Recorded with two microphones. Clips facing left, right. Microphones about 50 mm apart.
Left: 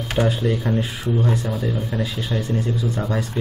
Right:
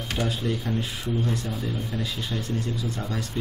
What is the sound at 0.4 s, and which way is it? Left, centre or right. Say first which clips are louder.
Speech: left 6 dB; left.